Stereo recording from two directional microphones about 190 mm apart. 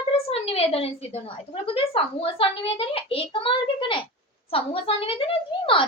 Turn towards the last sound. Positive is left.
turn(degrees=30)  # may be behind; listen again after turning